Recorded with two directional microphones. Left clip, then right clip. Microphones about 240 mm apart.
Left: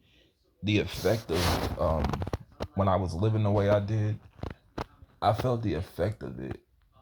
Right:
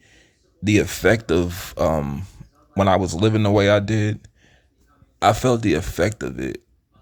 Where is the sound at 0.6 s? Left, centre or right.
Right.